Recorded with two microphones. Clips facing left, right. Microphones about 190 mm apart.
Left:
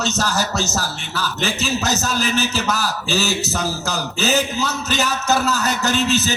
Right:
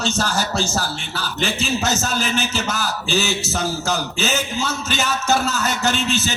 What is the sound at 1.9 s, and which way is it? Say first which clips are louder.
Speech: left 1 dB; 35° left (ahead or behind).